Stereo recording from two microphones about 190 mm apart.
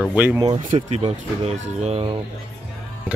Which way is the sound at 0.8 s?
30° right (ahead or behind).